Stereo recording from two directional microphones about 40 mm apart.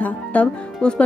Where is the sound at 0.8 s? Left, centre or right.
Left.